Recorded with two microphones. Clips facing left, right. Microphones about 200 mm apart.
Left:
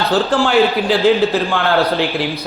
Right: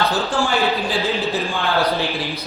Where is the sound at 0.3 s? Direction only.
70° left (ahead or behind).